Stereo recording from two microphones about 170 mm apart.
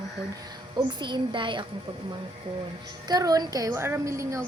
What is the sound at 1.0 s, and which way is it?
Speech, 30° right (ahead or behind).